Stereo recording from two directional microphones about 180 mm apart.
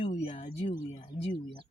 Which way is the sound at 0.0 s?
35° left (ahead or behind).